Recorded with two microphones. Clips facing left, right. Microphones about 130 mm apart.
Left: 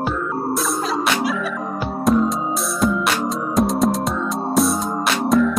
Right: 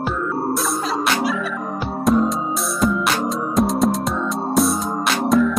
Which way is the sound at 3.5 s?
Centre (ahead or behind).